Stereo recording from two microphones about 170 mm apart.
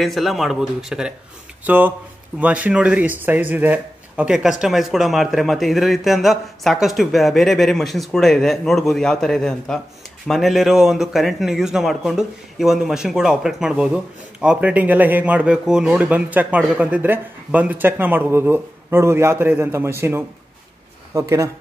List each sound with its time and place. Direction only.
0.0 s a man's voice: centre (ahead or behind); by 21.5 s 20° right (ahead or behind)